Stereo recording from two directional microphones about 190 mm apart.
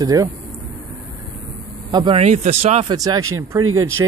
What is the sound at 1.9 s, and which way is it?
Speech, 25° right (ahead or behind).